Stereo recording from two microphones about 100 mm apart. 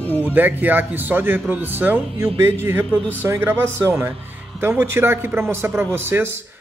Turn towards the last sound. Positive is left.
turn(degrees=-25)  # may be behind; listen again after turning